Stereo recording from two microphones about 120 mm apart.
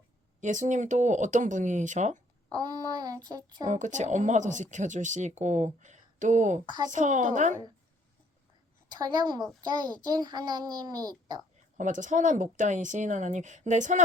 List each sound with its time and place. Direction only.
0.4 s speech: 90° right
2.5 s child singing: 35° right (ahead or behind)
3.7 s speech: 90° right
9.0 s a child's voice: 35° right (ahead or behind)
11.8 s speech: 90° right